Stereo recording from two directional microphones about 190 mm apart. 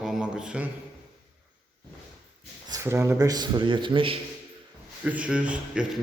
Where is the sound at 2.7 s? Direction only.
15° right (ahead or behind).